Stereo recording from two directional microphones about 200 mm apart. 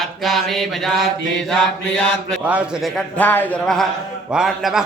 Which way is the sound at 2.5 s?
5° right (ahead or behind).